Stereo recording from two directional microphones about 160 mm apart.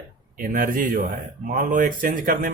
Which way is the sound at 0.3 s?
60° right (ahead or behind).